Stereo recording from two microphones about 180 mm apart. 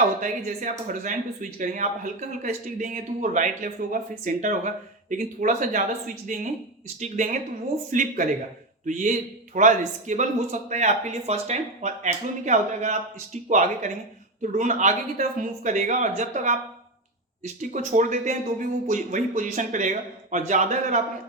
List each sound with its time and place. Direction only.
0.2 s a man's voice: 45° right (ahead or behind)